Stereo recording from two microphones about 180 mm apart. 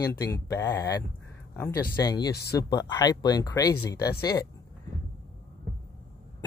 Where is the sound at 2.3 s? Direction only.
65° left (ahead or behind).